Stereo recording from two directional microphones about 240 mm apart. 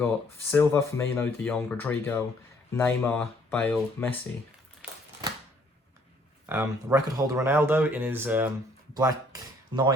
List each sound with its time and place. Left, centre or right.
0.5 s speech: centre
4.8 s typewriter: centre
6.4 s speech: centre